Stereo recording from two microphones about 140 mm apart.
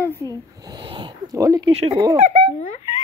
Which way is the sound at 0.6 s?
30° right (ahead or behind).